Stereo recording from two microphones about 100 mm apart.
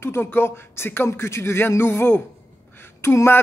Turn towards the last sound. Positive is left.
turn(degrees=25)  # may be behind; listen again after turning